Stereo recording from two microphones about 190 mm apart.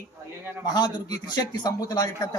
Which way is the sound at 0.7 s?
20° left (ahead or behind).